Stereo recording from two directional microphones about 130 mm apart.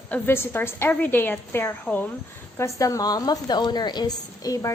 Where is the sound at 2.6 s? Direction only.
25° left (ahead or behind).